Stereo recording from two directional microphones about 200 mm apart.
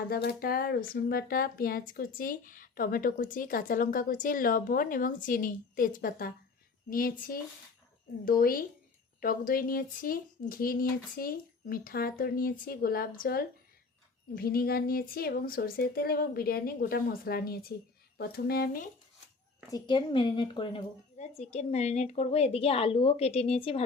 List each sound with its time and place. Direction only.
0.1 s speech: 50° left (ahead or behind)
19.7 s a woman's voice: 25° left (ahead or behind)